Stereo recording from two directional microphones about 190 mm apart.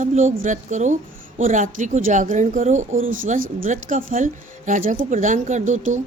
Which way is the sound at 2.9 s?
90° right.